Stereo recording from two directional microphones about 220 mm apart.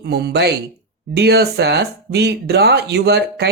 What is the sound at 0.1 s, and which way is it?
Speech, 50° right (ahead or behind).